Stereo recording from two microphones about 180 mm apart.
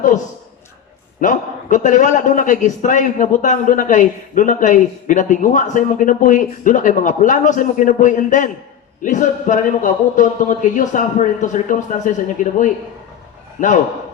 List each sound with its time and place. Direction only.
1.2 s a man's voice: 45° left (ahead or behind)